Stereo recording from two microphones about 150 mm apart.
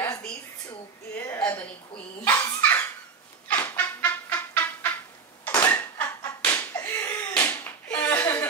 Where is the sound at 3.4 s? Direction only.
10° left (ahead or behind).